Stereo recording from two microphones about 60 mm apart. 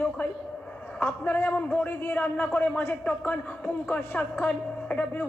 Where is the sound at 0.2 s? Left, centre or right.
Left.